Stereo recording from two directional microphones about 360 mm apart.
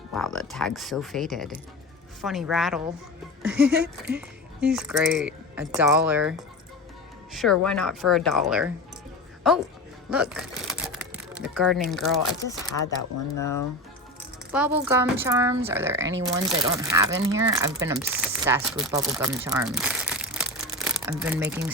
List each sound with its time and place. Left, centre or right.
0.1 s speech: centre
10.1 s typewriter: centre
11.9 s speech: centre
12.7 s speech: left
14.5 s speech: centre